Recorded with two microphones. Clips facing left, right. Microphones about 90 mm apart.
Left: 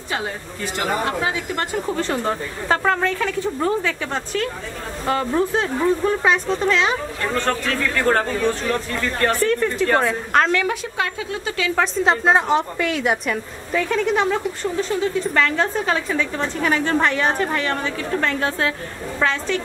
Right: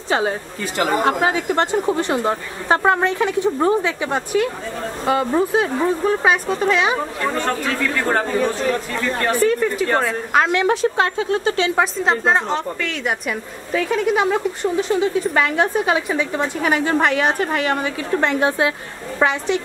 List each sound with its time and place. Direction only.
1.0 s a woman's voice: 35° right (ahead or behind); by 10.5 s 5° right (ahead or behind)
10.5 s speech: 25° right (ahead or behind)
11.8 s a woman's voice: centre (ahead or behind); by 19.6 s 15° right (ahead or behind)